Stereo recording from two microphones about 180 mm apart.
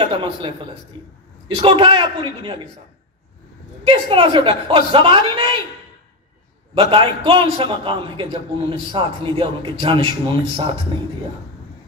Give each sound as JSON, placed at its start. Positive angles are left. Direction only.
{"t": 0.0, "sound": "a man's voice", "side_deg": -30}
{"t": 3.8, "sound": "a man's voice", "side_deg": -30}
{"t": 6.7, "sound": "a man's voice", "side_deg": -30}